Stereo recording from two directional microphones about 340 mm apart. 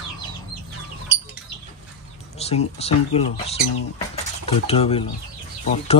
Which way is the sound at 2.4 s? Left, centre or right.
Centre.